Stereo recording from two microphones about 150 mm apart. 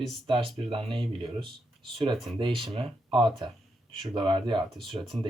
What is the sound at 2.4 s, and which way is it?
Speech, 35° right (ahead or behind).